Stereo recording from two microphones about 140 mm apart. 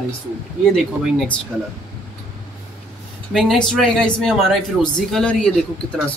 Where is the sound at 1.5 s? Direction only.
5° right (ahead or behind).